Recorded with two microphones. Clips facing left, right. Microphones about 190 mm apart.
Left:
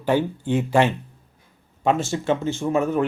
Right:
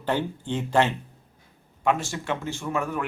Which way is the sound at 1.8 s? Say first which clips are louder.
Left 5 dB; 25° left (ahead or behind).